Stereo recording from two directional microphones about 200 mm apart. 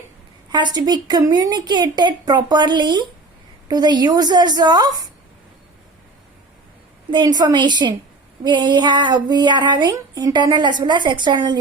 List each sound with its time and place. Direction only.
0.5 s a woman's voice: 20° right (ahead or behind)
7.1 s a woman's voice: 20° right (ahead or behind)